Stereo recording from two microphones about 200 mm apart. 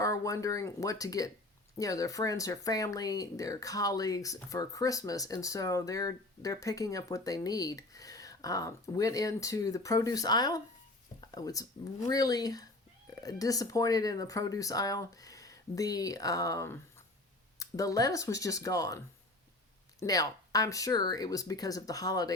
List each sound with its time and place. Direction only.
0.0 s speech: 15° left (ahead or behind)